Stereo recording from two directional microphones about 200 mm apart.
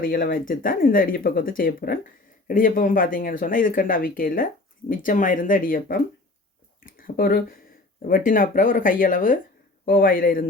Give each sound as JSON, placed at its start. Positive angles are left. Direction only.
{"t": 0.0, "sound": "speech", "side_deg": 45}